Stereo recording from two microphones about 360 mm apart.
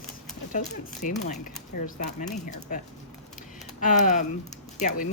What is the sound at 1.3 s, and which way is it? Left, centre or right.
Speech, left.